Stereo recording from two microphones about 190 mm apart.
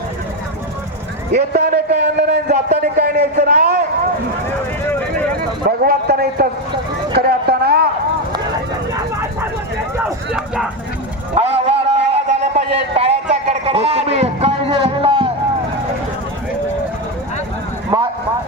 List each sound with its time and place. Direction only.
1.4 s a sound: 45° right (ahead or behind)
2.6 s speech: 55° right (ahead or behind)
3.3 s a man's voice: 40° right (ahead or behind)
4.9 s vehicle: 10° left (ahead or behind)
5.6 s a man's voice: 55° right (ahead or behind)
7.1 s a sound: 55° right (ahead or behind)
10.0 s speech: 5° right (ahead or behind)
11.3 s a sound: 35° right (ahead or behind)
17.9 s vehicle: 20° right (ahead or behind)